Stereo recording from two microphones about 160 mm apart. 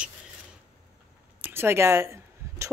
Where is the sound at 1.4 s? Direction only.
15° right (ahead or behind).